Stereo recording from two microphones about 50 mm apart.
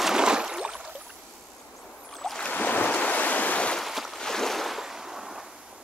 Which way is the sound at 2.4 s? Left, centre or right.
Left.